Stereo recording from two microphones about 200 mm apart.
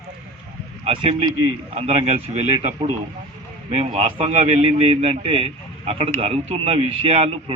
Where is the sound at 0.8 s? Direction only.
30° right (ahead or behind).